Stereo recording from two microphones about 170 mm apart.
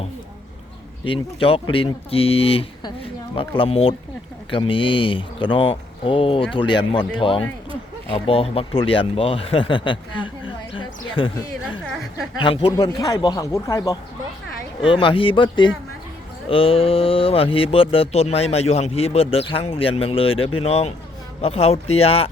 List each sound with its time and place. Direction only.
1.0 s speech: 30° left (ahead or behind)
12.4 s a man's voice: 30° left (ahead or behind)
14.8 s a man's voice: 30° left (ahead or behind)